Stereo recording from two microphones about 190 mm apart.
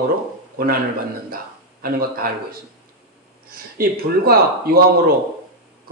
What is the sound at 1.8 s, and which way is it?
Speech, 50° right (ahead or behind).